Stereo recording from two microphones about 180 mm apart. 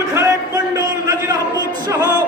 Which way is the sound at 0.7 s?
20° right (ahead or behind).